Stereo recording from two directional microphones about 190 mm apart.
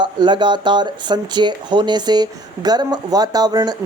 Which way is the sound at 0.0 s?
25° right (ahead or behind).